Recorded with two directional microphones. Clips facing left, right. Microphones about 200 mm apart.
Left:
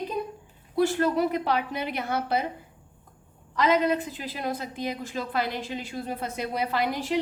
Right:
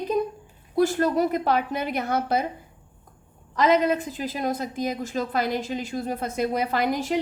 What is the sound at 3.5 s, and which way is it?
A woman's voice, 45° right (ahead or behind).